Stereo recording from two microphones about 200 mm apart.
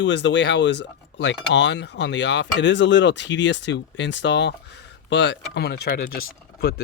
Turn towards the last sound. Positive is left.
turn(degrees=55)  # may be behind; listen again after turning